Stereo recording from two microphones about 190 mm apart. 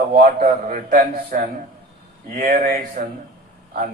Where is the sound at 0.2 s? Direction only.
45° right (ahead or behind).